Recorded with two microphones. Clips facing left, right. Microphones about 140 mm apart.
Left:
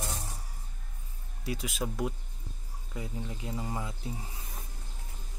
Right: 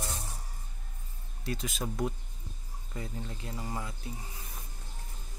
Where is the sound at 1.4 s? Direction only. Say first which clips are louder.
Left 1 dB; 10° left (ahead or behind).